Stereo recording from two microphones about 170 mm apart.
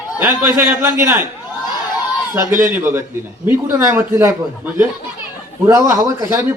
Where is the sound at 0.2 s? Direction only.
10° right (ahead or behind).